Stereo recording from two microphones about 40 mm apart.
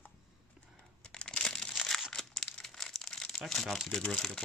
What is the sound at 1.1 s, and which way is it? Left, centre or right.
Crumpling, left.